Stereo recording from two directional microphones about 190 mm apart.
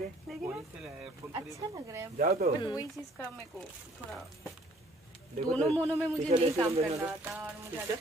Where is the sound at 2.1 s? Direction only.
50° right (ahead or behind).